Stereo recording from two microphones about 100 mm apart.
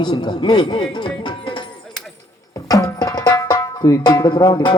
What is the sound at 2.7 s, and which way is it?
Tabla, 40° left (ahead or behind).